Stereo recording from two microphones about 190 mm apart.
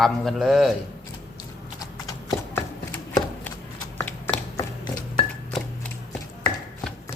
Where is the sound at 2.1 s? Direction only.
15° left (ahead or behind).